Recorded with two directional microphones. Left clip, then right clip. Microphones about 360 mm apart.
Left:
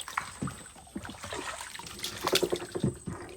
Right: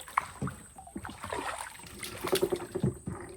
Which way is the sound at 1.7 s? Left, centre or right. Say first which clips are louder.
Left 4 dB; centre.